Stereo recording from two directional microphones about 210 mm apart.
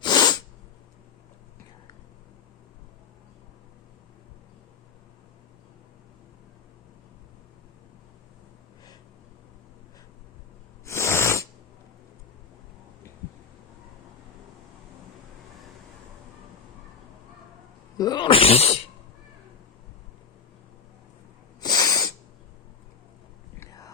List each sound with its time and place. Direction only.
0.0 s sneeze: 20° left (ahead or behind)
10.8 s sneeze: 15° left (ahead or behind)
17.9 s speech: 20° left (ahead or behind)
21.6 s snort: 20° left (ahead or behind)
23.6 s whispering: 15° left (ahead or behind)